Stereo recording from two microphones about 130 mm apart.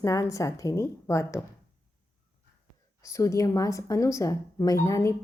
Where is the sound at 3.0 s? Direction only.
25° left (ahead or behind).